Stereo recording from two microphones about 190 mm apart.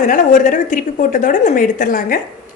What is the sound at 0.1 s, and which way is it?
Speech, 40° left (ahead or behind).